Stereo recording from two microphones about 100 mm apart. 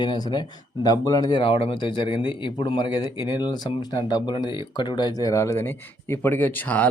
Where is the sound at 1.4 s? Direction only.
65° left (ahead or behind); by 5.3 s 50° left (ahead or behind).